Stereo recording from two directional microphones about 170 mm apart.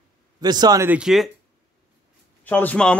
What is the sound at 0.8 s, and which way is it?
Speech, 5° right (ahead or behind).